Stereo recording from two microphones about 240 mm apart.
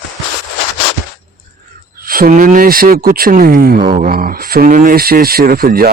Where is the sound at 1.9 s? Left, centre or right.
Right.